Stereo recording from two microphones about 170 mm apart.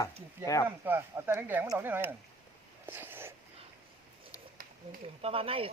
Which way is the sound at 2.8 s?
10° right (ahead or behind).